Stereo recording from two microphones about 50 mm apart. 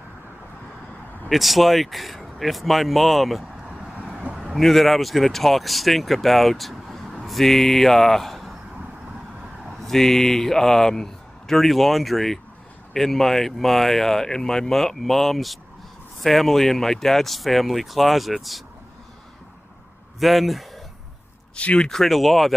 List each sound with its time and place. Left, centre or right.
1.3 s speech: centre
3.9 s vehicle: right
4.6 s speech: centre
9.8 s speech: centre
20.2 s speech: centre
21.5 s speech: left
21.8 s speech: centre